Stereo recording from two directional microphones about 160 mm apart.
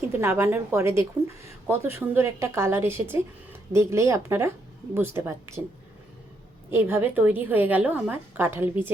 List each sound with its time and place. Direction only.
0.1 s a woman's voice: 15° right (ahead or behind)
6.7 s a woman's voice: 15° right (ahead or behind)